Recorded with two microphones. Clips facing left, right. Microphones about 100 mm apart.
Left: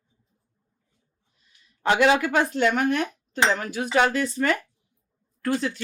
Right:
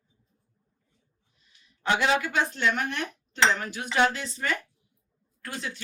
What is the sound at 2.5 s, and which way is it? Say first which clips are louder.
Cutlery: left 6 dB; 50° left (ahead or behind).